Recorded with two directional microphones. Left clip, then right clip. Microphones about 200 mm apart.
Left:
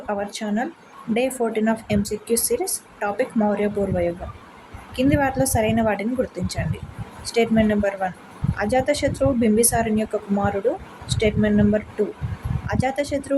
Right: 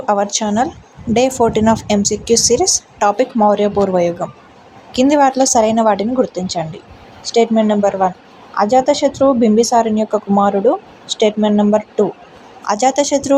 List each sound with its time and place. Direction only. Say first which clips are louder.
0.1 s a woman's voice: right 11 dB; 25° right (ahead or behind)